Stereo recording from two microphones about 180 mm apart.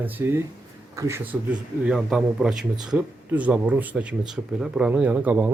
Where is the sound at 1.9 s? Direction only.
5° right (ahead or behind).